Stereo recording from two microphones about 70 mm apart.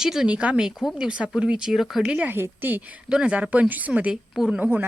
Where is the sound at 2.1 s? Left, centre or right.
Centre.